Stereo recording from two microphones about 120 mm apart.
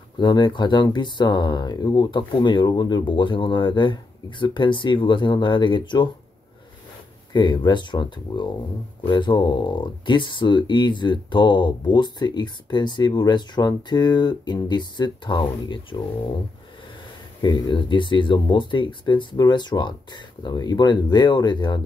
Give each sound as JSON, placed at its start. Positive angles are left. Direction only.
{"t": 0.2, "sound": "speech", "side_deg": 40}
{"t": 7.3, "sound": "speech", "side_deg": 40}
{"t": 17.4, "sound": "speech", "side_deg": 35}